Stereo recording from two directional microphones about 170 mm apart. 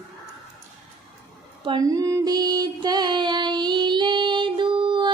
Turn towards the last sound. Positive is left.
turn(degrees=-25)  # may be behind; listen again after turning